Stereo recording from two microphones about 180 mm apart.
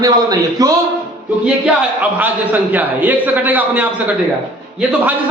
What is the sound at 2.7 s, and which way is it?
A man's voice, 10° right (ahead or behind).